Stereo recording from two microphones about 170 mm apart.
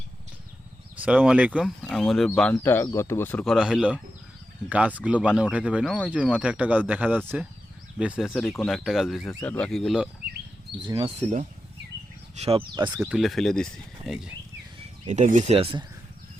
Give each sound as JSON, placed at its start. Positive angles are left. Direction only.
{"t": 0.9, "sound": "speech", "side_deg": -10}
{"t": 2.5, "sound": "speech", "side_deg": 15}
{"t": 3.4, "sound": "speech", "side_deg": -5}
{"t": 10.8, "sound": "speech", "side_deg": -25}
{"t": 11.2, "sound": "speech", "side_deg": -45}
{"t": 12.4, "sound": "speech", "side_deg": -35}
{"t": 13.1, "sound": "speech", "side_deg": 0}
{"t": 15.0, "sound": "speech", "side_deg": -45}